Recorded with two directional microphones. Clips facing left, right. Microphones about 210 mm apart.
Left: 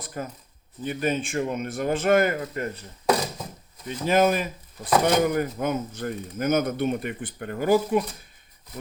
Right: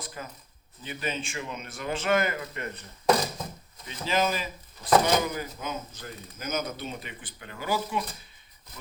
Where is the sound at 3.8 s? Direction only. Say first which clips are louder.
Left 7 dB; 50° left (ahead or behind).